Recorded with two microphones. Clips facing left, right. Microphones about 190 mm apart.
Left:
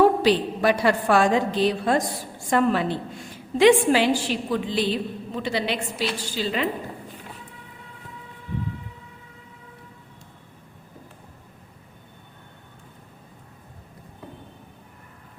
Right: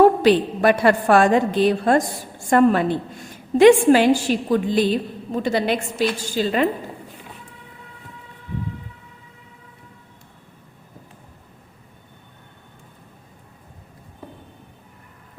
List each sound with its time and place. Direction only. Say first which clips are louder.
0.0 s a woman's voice: right 4 dB; 50° right (ahead or behind)